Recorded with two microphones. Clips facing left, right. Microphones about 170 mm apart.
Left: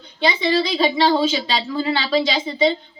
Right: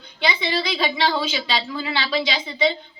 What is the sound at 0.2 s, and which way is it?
A woman's voice, 40° left (ahead or behind).